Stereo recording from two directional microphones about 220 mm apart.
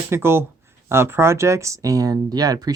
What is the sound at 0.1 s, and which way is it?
Speech, 10° right (ahead or behind).